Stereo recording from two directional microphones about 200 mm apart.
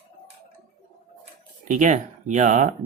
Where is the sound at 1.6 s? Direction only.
40° right (ahead or behind).